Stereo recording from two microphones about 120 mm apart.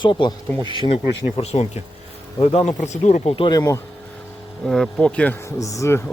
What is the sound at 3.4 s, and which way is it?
Speech, 30° left (ahead or behind).